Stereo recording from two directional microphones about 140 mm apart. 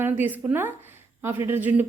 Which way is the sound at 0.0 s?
15° right (ahead or behind).